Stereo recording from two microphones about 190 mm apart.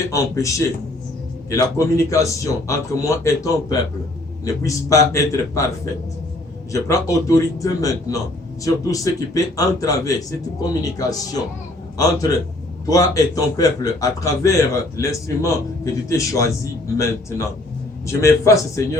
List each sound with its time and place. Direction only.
0.1 s a man's voice: 15° left (ahead or behind)
12.9 s a man's voice: 15° left (ahead or behind)